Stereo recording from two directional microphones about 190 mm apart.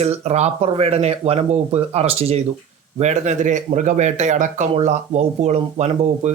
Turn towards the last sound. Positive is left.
turn(degrees=-35)  # may be behind; listen again after turning